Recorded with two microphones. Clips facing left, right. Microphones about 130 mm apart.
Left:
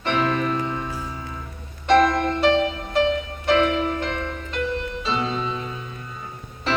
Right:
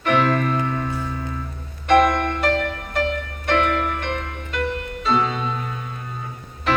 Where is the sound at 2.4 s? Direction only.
55° right (ahead or behind).